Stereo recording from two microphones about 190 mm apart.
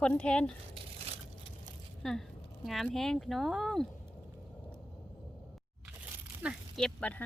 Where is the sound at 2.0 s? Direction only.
Centre (ahead or behind).